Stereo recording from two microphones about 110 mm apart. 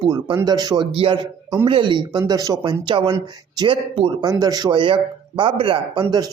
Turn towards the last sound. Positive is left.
turn(degrees=-35)  # may be behind; listen again after turning